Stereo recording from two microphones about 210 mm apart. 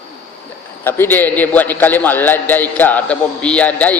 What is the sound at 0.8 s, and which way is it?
A man's voice, 10° left (ahead or behind).